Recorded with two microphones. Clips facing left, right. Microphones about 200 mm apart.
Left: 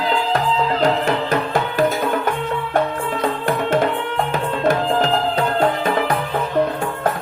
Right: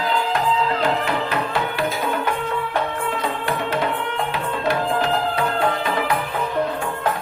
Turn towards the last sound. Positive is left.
turn(degrees=45)  # may be behind; listen again after turning